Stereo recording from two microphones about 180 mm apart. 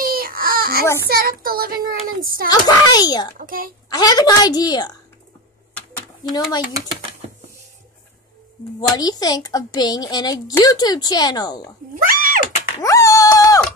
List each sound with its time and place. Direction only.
0.0 s baby cry: 55° right (ahead or behind)
1.0 s a child's voice: 55° right (ahead or behind)
2.5 s a child's voice: 20° left (ahead or behind)
3.3 s a child's voice: 50° right (ahead or behind)
3.9 s a child's voice: 20° left (ahead or behind)
8.9 s a child's voice: 20° left (ahead or behind)
11.9 s speech: 50° right (ahead or behind)
12.8 s a sound: 15° left (ahead or behind)